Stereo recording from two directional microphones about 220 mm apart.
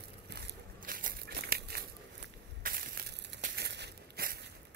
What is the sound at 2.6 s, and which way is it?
Crushing, 40° right (ahead or behind).